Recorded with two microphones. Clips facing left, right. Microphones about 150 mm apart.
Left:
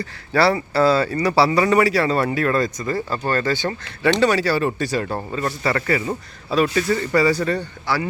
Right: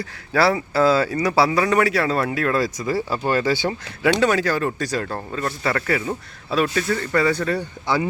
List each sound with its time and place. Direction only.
0.0 s speech: centre (ahead or behind)
7.9 s speech: 20° right (ahead or behind)